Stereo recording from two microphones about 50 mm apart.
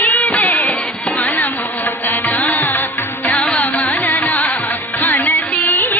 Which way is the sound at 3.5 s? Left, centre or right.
Left.